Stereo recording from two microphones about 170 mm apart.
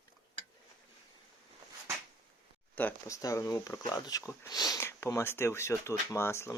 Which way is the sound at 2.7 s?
10° left (ahead or behind).